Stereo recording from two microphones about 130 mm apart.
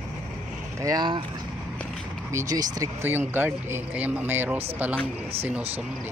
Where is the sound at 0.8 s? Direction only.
30° right (ahead or behind).